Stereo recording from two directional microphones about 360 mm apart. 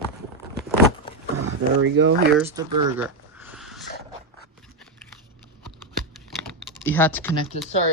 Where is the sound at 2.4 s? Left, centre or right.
Centre.